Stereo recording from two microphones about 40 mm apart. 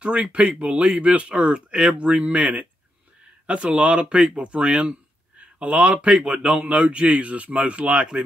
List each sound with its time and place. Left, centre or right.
0.0 s speech: right
2.0 s speech: right